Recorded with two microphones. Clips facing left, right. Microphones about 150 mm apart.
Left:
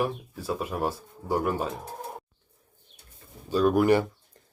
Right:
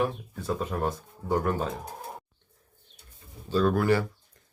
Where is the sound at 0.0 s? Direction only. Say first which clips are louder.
Even; 10° left (ahead or behind).